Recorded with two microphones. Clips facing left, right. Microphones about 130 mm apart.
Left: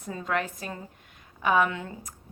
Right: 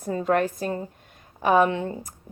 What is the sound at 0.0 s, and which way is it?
A woman's voice, 40° right (ahead or behind).